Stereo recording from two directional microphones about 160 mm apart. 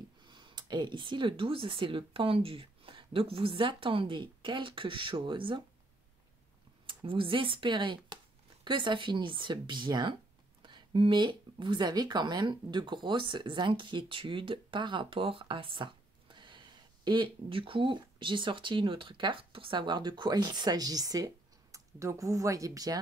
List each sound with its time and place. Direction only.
0.2 s speech: 30° right (ahead or behind)
6.9 s speech: 30° right (ahead or behind)